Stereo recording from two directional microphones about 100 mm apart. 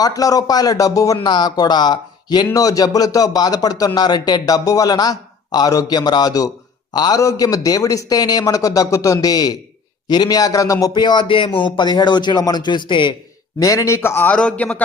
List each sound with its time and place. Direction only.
0.0 s a man's voice: 35° left (ahead or behind); by 13.1 s 50° left (ahead or behind)
13.6 s a man's voice: 35° left (ahead or behind); by 14.8 s 10° left (ahead or behind)